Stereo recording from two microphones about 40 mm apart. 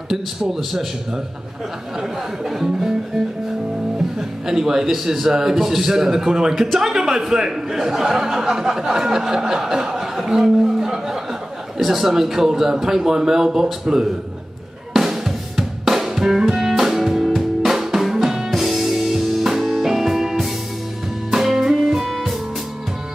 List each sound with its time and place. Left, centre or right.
0.1 s speech: centre
2.0 s speech: centre
6.5 s speech: centre
6.8 s speech: centre
15.0 s music: centre
17.6 s drum: centre
18.5 s music: centre